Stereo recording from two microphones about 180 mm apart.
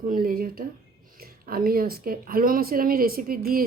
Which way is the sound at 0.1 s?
50° right (ahead or behind).